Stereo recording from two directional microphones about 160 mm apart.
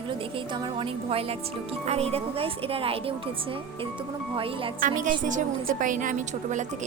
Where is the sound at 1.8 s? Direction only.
40° right (ahead or behind).